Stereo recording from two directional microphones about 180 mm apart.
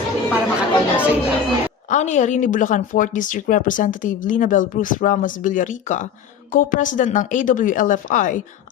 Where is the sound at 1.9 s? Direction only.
40° left (ahead or behind).